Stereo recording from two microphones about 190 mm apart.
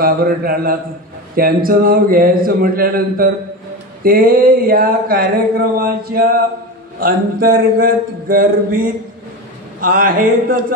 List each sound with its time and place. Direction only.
0.0 s a man's voice: 50° right (ahead or behind)